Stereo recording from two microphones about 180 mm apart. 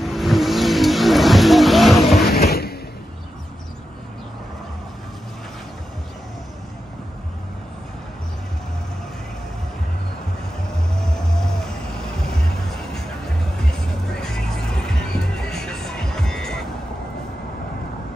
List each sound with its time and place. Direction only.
0.0 s vehicle: centre (ahead or behind)
2.2 s a sound: 60° left (ahead or behind)
11.0 s music: 5° left (ahead or behind)
14.1 s music: 5° left (ahead or behind)